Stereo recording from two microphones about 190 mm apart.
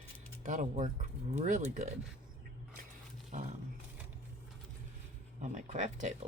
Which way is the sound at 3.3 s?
40° right (ahead or behind).